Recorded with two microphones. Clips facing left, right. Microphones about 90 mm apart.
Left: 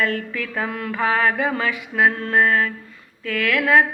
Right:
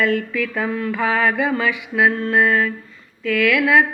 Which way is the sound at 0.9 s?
40° left (ahead or behind).